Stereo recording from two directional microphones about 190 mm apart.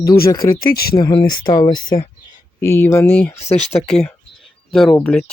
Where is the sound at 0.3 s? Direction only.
20° left (ahead or behind).